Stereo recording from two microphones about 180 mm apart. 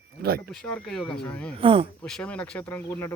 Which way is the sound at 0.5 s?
5° left (ahead or behind).